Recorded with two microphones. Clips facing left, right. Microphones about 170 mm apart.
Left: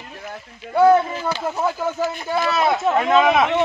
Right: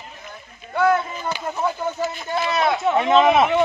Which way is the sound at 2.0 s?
10° left (ahead or behind).